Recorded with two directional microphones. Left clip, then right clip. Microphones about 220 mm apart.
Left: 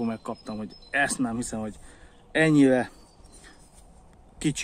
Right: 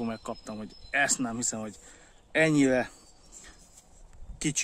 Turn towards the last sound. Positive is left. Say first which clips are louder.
# left 2 dB
turn(degrees=-15)  # may be behind; listen again after turning